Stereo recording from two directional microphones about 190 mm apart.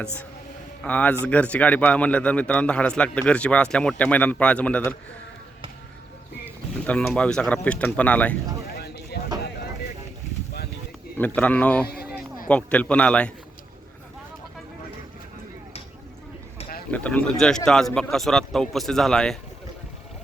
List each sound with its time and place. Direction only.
0.9 s speech: 5° left (ahead or behind)
6.8 s speech: 5° left (ahead or behind)
8.8 s a sound: 60° left (ahead or behind)
11.3 s speech: 5° left (ahead or behind)
16.9 s a man's voice: 5° left (ahead or behind)